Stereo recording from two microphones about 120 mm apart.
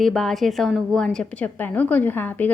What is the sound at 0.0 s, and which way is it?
A woman's voice, 5° left (ahead or behind).